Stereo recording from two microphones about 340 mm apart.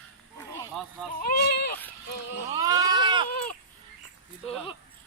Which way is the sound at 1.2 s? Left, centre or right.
Left.